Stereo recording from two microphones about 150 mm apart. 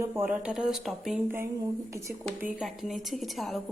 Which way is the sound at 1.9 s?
15° right (ahead or behind).